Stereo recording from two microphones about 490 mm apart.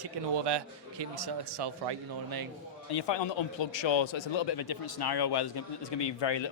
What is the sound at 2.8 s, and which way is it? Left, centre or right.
Speech, left.